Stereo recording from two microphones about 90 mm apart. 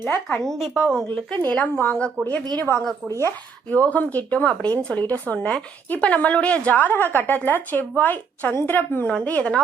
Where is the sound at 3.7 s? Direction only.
15° left (ahead or behind).